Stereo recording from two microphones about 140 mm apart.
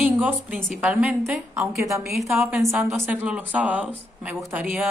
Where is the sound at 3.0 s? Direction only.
10° right (ahead or behind).